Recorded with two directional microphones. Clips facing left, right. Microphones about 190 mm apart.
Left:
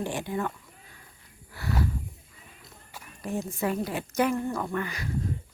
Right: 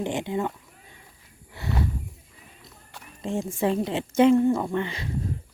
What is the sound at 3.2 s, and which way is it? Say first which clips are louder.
A woman's voice: right 4 dB; 25° right (ahead or behind).